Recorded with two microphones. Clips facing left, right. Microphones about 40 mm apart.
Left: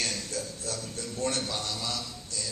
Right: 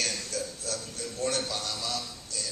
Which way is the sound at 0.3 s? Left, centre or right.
Left.